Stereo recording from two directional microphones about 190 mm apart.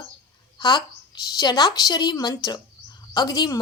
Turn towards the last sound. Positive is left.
turn(degrees=20)  # may be behind; listen again after turning